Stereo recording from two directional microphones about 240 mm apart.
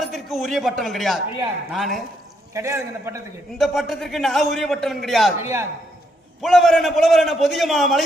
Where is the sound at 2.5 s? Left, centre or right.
Centre.